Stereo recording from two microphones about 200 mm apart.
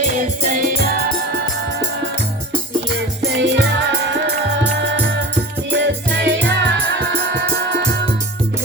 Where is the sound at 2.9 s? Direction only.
65° right (ahead or behind).